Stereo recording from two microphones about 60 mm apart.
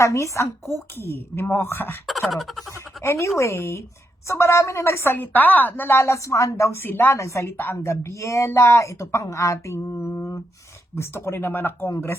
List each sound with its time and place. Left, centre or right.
0.0 s speech: left
0.9 s a woman's voice: left
2.0 s a sound: centre
2.6 s speech: left
5.1 s speech: left
6.0 s speech: left
6.7 s a woman's voice: left
7.2 s speech: left
7.5 s a woman's voice: left
7.8 s speech: left